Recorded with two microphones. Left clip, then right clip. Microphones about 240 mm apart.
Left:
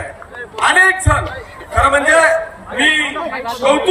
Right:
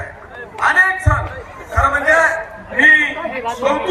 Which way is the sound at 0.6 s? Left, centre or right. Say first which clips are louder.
Left 2 dB; left.